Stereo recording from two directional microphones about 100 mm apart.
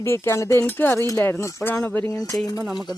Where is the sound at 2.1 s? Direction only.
35° left (ahead or behind).